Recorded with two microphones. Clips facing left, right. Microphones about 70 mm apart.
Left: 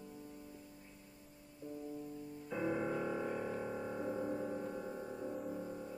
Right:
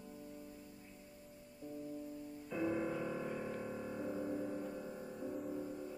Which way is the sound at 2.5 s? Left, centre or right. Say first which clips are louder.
Left 1 dB; centre.